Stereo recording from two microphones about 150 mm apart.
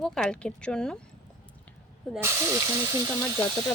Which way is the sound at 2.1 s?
15° right (ahead or behind).